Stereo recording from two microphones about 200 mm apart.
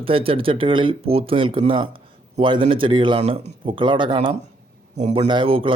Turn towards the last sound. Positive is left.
turn(degrees=-25)  # may be behind; listen again after turning